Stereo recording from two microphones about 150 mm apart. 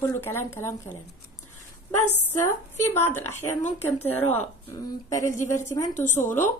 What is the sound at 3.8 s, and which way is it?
Speech, 15° left (ahead or behind).